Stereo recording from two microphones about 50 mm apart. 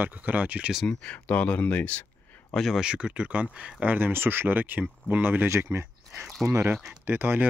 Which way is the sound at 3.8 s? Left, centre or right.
Right.